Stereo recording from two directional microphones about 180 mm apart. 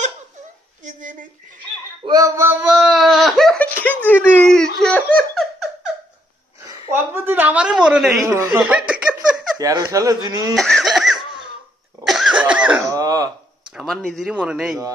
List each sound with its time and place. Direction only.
2.0 s a sound: 20° right (ahead or behind); by 5.7 s centre (ahead or behind)
6.6 s a sound: 15° right (ahead or behind)
8.2 s speech: 15° right (ahead or behind)
8.5 s laughter: 5° right (ahead or behind)
9.6 s speech: 15° right (ahead or behind)
10.5 s cough: centre (ahead or behind)
12.9 s throat clearing: 20° right (ahead or behind)
13.7 s a man's voice: centre (ahead or behind)